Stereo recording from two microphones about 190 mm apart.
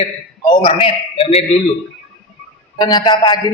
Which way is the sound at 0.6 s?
30° left (ahead or behind).